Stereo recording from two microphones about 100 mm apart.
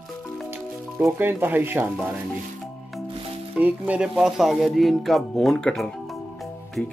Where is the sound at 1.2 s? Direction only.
20° right (ahead or behind).